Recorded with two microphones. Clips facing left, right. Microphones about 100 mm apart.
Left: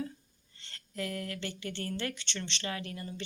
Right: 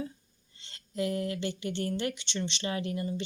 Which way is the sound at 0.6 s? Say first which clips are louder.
Right 6 dB; 20° right (ahead or behind).